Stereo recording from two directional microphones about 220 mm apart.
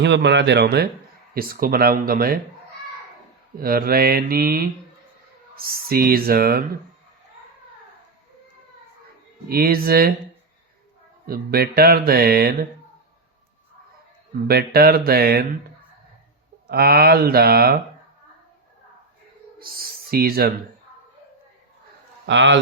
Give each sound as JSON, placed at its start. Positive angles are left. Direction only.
{"t": 0.0, "sound": "mantra", "side_deg": -50}
{"t": 1.3, "sound": "speech", "side_deg": -40}
{"t": 3.6, "sound": "mantra", "side_deg": -40}
{"t": 9.5, "sound": "mantra", "side_deg": -45}
{"t": 11.3, "sound": "mantra", "side_deg": -45}
{"t": 14.4, "sound": "mantra", "side_deg": -45}
{"t": 16.6, "sound": "mantra", "side_deg": -45}
{"t": 19.5, "sound": "speech", "side_deg": -45}
{"t": 22.3, "sound": "a man's voice", "side_deg": -55}